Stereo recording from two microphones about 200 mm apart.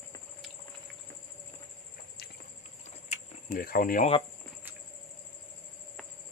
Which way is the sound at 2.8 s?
35° left (ahead or behind).